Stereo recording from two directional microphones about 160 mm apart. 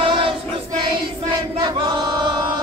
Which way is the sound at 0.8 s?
30° right (ahead or behind).